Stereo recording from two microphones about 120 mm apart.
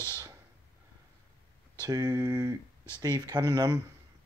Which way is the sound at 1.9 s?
35° right (ahead or behind).